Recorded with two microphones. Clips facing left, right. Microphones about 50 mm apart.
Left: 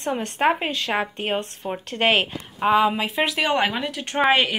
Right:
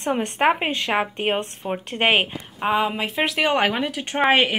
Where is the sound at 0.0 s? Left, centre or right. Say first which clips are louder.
Right 2 dB; right.